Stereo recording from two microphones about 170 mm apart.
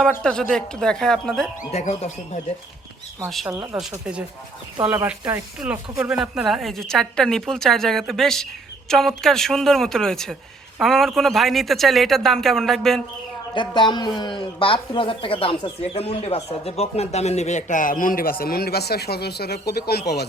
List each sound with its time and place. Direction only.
0.0 s speech: 5° left (ahead or behind)
1.7 s speech: 40° left (ahead or behind)
3.2 s speech: centre (ahead or behind)
13.5 s speech: 30° left (ahead or behind); by 20.2 s 70° left (ahead or behind)